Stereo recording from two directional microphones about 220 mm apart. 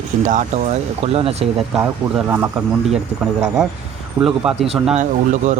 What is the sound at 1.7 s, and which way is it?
Speech, 10° right (ahead or behind).